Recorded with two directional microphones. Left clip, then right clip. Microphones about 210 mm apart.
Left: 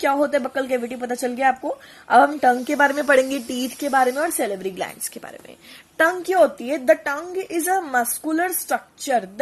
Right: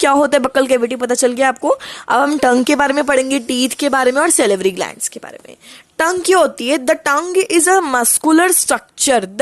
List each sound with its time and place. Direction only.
0.0 s speech: 45° right (ahead or behind)
6.0 s a woman's voice: 40° right (ahead or behind)